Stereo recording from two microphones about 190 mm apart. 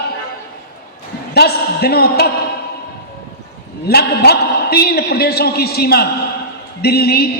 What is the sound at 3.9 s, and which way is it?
A man's voice, 55° left (ahead or behind).